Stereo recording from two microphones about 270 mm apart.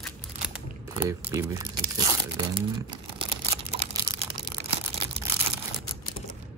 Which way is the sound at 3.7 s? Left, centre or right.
Right.